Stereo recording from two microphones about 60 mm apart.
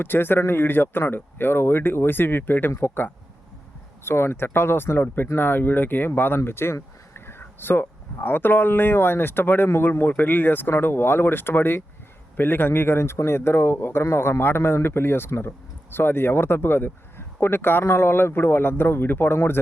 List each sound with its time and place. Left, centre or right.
0.0 s speech: left